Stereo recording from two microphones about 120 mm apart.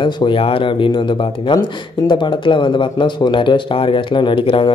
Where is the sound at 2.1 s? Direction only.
40° left (ahead or behind).